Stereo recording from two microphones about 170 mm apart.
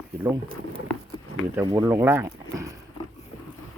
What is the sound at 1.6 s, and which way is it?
Speech, 20° right (ahead or behind).